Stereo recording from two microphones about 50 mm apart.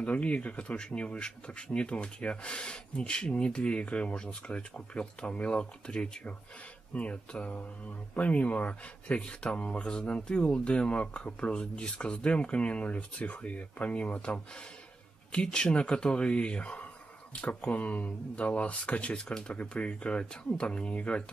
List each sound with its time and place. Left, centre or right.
0.0 s speech: left
15.3 s speech: centre